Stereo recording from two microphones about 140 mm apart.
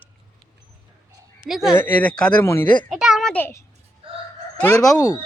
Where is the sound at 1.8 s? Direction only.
15° left (ahead or behind).